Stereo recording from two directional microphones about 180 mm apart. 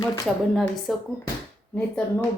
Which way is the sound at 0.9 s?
Centre (ahead or behind).